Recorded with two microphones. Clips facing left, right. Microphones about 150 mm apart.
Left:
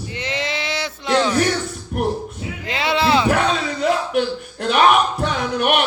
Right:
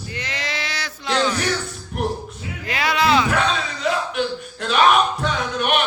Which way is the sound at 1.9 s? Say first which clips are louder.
Left 2 dB; 50° left (ahead or behind).